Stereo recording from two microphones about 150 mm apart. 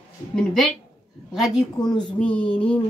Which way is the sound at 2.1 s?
10° left (ahead or behind).